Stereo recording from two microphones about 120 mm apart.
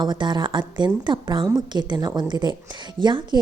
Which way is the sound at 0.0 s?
35° right (ahead or behind).